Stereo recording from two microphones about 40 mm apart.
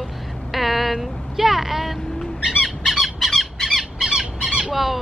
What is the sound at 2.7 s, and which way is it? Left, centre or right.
Squawk, centre.